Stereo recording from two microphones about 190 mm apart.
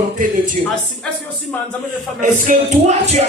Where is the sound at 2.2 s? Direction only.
40° right (ahead or behind).